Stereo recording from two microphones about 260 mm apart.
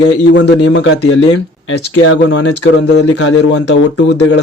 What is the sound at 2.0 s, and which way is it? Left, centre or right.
Speech, left.